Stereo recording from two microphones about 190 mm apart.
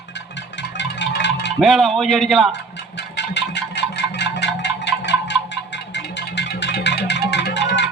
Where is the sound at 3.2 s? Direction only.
65° left (ahead or behind).